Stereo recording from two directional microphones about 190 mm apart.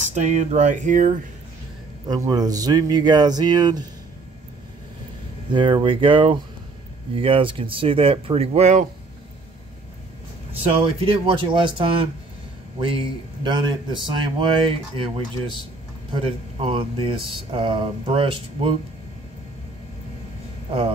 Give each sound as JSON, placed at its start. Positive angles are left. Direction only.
{"t": 0.1, "sound": "speech", "side_deg": -40}
{"t": 2.0, "sound": "speech", "side_deg": -20}
{"t": 5.5, "sound": "speech", "side_deg": -25}
{"t": 10.6, "sound": "speech", "side_deg": -30}